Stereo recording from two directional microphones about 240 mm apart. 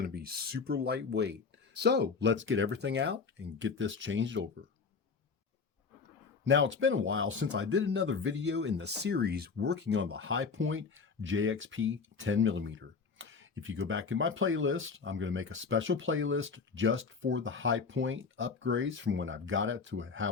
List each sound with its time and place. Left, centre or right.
0.0 s speech: right
6.4 s speech: right